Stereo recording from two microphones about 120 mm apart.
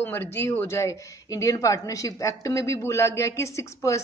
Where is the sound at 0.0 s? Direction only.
20° left (ahead or behind).